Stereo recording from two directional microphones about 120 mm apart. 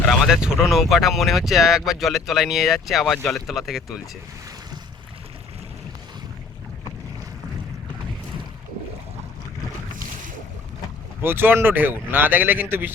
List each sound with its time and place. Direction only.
0.1 s speech: 5° right (ahead or behind)
11.2 s speech: 20° right (ahead or behind)